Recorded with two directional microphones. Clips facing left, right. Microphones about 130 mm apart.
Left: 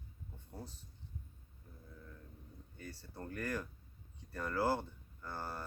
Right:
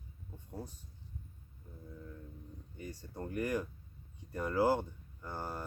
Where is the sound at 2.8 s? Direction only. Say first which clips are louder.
Right 5 dB; 15° right (ahead or behind).